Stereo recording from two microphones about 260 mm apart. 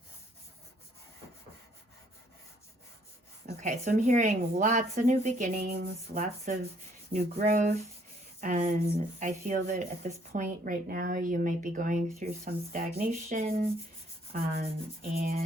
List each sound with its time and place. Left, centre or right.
3.4 s a woman's voice: right